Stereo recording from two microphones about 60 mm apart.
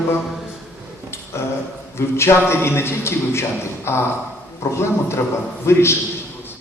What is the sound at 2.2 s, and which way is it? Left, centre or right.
A man's voice, left.